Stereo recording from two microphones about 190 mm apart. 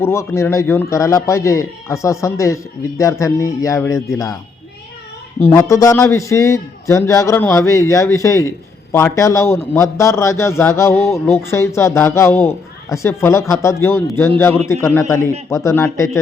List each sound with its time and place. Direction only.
0.0 s a man's voice: 15° left (ahead or behind)
5.5 s a man's voice: 15° left (ahead or behind)